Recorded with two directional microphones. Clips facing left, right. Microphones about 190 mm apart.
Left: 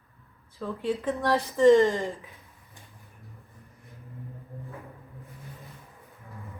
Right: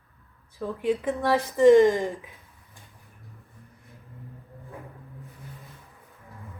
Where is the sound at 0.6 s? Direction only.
15° right (ahead or behind).